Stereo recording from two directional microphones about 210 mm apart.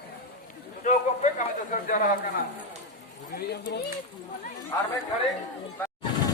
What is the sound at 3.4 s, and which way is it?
Speech, 50° left (ahead or behind).